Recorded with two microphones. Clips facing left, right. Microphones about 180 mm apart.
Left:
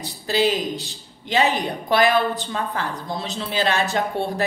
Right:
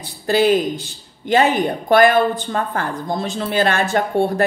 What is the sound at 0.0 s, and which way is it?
Speech, 55° right (ahead or behind).